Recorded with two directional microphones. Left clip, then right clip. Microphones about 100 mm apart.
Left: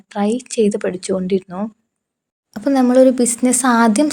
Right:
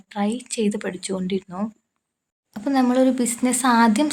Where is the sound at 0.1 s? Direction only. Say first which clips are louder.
Left 6 dB; 45° left (ahead or behind).